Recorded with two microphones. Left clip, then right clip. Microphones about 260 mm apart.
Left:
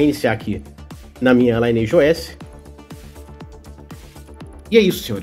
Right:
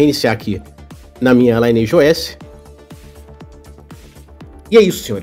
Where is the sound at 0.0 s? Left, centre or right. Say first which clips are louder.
Right 4 dB; centre.